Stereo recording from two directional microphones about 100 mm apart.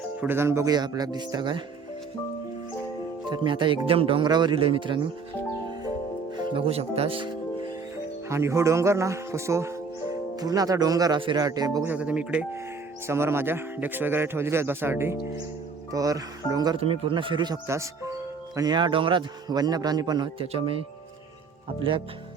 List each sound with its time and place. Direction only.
0.2 s a man's voice: 25° right (ahead or behind)
0.7 s speech: 40° right (ahead or behind)
3.2 s speech: 50° right (ahead or behind)
4.3 s a man's voice: 50° right (ahead or behind)
6.3 s music: 50° right (ahead or behind)
6.7 s speech: 90° right; by 7.3 s 75° right (ahead or behind)
8.3 s a man's voice: 30° right (ahead or behind)
10.3 s speech: 40° right (ahead or behind)
11.8 s speech: 15° right (ahead or behind)
13.1 s a man's voice: 25° right (ahead or behind)
15.9 s speech: 35° right (ahead or behind)
16.8 s a man's voice: 70° right (ahead or behind); by 17.6 s 50° right (ahead or behind)
17.7 s speech: 30° right (ahead or behind)
20.4 s a man's voice: 70° right (ahead or behind)